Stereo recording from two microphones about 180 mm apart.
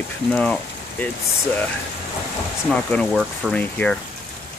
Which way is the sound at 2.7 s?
5° left (ahead or behind).